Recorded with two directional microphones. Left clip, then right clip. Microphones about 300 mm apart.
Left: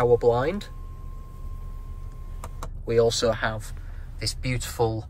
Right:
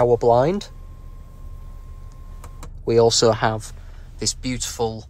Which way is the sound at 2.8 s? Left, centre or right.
Centre.